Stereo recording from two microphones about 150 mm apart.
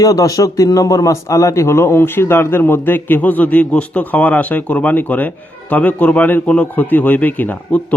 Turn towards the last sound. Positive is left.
turn(degrees=10)  # may be behind; listen again after turning